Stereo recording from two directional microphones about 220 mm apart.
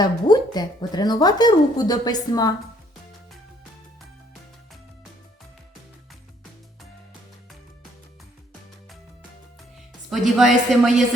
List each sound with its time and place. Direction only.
0.0 s a woman's voice: 20° left (ahead or behind)
10.1 s a woman's voice: centre (ahead or behind)